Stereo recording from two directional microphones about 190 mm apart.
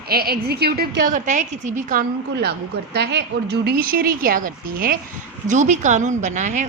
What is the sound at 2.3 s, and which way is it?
Speech, 60° right (ahead or behind).